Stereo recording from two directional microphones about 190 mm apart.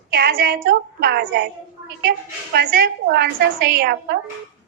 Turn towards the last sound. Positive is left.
turn(degrees=-55)  # may be behind; listen again after turning